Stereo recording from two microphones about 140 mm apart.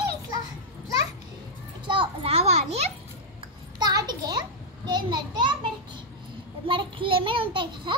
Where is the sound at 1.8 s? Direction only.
35° right (ahead or behind).